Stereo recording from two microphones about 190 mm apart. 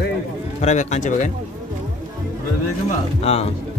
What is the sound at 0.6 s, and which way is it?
Speech, 40° left (ahead or behind).